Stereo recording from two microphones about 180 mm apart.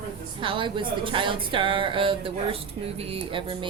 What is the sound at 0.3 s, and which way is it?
Speech, 25° right (ahead or behind).